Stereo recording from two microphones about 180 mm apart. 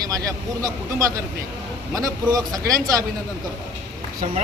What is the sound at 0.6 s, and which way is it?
A man's voice, 20° right (ahead or behind).